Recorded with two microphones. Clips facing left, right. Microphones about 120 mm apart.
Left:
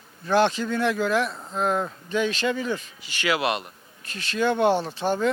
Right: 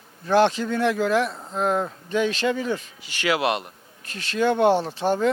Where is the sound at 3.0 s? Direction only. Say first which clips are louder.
Right 2 dB; 50° right (ahead or behind).